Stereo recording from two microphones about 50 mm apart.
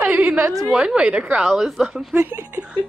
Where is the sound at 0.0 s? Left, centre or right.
Right.